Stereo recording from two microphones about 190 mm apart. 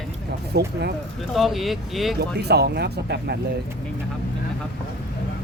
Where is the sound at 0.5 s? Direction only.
60° right (ahead or behind).